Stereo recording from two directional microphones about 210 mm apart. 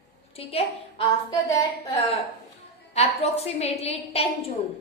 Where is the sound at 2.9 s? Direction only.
30° left (ahead or behind).